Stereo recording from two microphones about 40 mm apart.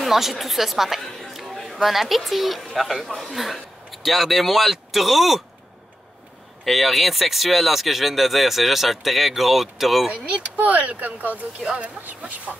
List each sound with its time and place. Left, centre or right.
0.0 s speech: centre
6.6 s speech: centre
10.1 s speech: right